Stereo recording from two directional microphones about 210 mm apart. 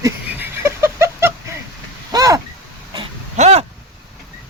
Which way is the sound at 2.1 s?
15° right (ahead or behind).